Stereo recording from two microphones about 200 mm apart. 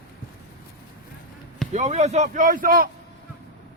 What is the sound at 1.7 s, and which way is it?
A man's voice, 35° right (ahead or behind).